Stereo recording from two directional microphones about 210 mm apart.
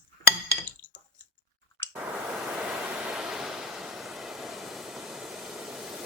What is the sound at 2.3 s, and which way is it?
Waves, 5° right (ahead or behind).